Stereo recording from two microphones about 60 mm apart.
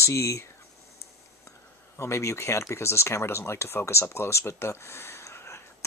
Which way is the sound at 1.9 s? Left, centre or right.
Left.